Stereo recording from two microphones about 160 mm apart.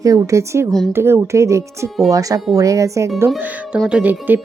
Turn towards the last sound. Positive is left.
turn(degrees=-10)  # may be behind; listen again after turning